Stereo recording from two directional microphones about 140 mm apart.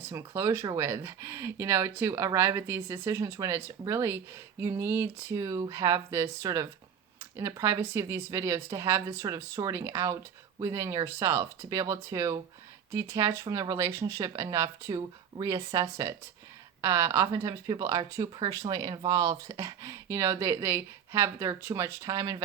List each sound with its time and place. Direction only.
0.0 s speech: 20° right (ahead or behind)